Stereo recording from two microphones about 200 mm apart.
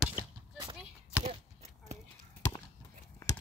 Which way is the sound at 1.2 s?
35° right (ahead or behind).